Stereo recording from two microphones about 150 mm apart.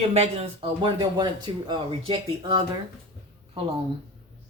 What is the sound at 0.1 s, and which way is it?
Speech, 45° right (ahead or behind).